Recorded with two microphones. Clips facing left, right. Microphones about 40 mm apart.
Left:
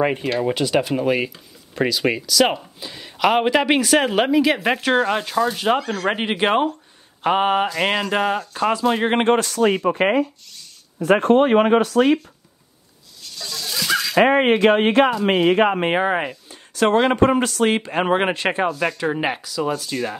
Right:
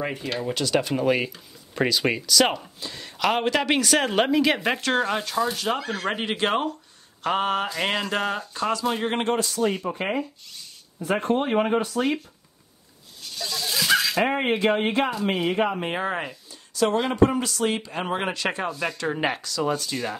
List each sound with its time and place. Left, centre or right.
0.0 s speech: left
0.4 s speech: left
0.7 s speech: centre
4.7 s speech: centre
5.8 s speech: centre
6.0 s speech: left
9.4 s speech: left
13.4 s a sound: centre
14.1 s speech: left
15.8 s speech: left
16.4 s a sound: left
17.1 s a man's voice: left
18.8 s speech: centre